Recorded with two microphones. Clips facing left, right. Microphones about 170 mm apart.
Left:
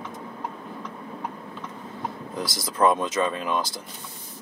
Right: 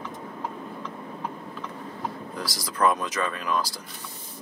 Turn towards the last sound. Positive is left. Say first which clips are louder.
# left 2 dB
turn(degrees=25)  # may be behind; listen again after turning